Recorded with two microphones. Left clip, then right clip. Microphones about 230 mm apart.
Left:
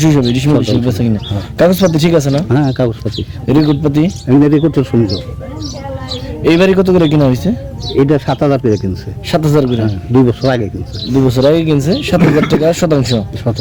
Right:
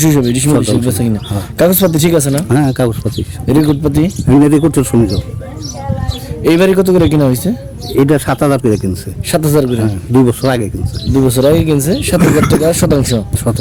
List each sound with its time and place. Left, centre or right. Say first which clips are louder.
0.0 s a man's voice: even; centre
2.5 s speech: right 1 dB; centre
3.4 s a man's voice: even; centre
4.3 s speech: right 1 dB; centre
6.4 s a man's voice: even; centre
7.9 s speech: right 1 dB; centre
9.3 s a man's voice: even; centre
10.1 s speech: even; centre
11.1 s a man's voice: even; centre
12.2 s speech: right 1 dB; centre
12.5 s a man's voice: even; centre